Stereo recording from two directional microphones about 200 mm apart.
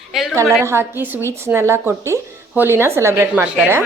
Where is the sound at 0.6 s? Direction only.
10° right (ahead or behind).